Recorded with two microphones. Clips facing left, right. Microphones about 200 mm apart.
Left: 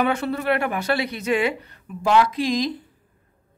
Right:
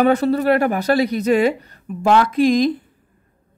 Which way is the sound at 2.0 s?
55° right (ahead or behind).